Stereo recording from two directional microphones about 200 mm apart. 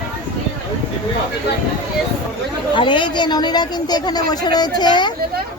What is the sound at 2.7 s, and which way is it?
Speech, 25° left (ahead or behind).